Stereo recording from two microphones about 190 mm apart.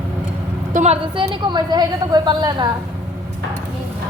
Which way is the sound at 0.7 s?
40° right (ahead or behind).